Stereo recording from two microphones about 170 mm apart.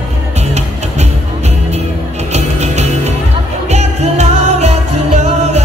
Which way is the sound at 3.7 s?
40° right (ahead or behind).